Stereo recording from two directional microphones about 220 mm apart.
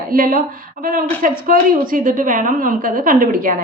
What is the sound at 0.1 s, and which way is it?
A woman's voice, 40° right (ahead or behind).